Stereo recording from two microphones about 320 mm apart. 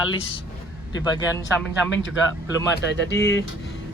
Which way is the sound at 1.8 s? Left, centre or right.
Left.